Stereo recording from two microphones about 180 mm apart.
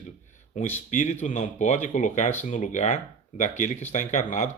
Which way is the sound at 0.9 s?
45° left (ahead or behind).